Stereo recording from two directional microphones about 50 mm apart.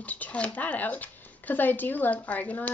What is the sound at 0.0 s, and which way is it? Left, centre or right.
Speech, left.